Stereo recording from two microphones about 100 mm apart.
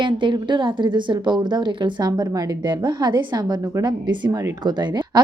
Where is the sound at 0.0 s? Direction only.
55° right (ahead or behind).